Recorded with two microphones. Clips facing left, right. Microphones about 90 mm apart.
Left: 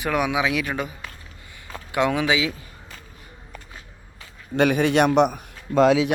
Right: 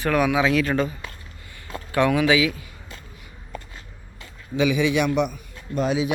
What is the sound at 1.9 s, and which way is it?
Speech, 20° left (ahead or behind).